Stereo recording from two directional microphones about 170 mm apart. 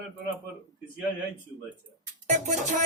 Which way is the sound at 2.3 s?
45° right (ahead or behind).